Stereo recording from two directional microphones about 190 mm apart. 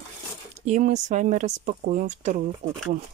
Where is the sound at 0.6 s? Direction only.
40° right (ahead or behind).